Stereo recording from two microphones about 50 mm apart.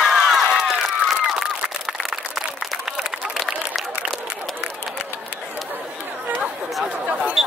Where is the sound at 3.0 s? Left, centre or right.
Centre.